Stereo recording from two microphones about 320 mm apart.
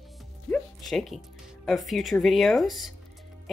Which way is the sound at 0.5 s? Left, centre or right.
Centre.